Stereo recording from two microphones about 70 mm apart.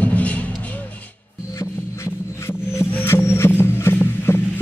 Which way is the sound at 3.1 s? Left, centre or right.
Left.